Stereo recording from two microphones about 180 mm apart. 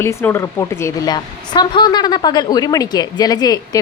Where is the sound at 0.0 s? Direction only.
15° left (ahead or behind).